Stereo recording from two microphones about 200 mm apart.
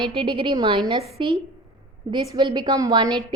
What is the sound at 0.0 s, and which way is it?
A woman's voice, 25° right (ahead or behind).